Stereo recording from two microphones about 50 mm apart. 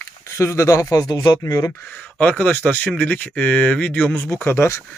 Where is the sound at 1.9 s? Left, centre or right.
Left.